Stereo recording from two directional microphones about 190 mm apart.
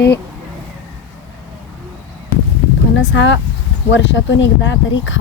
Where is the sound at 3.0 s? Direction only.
70° left (ahead or behind).